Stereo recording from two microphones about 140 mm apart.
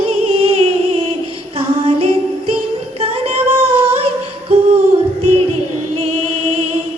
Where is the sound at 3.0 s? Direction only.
50° right (ahead or behind).